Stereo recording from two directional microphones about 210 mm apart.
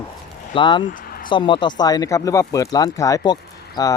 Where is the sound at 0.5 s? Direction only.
20° left (ahead or behind).